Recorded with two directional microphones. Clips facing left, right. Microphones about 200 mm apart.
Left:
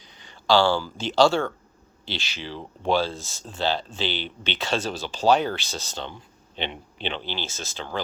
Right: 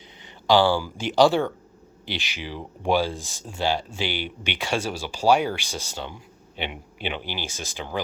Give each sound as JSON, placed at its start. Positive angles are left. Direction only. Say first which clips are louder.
{"t": 0.2, "sound": "speech", "louder": "right 1 dB", "side_deg": -20}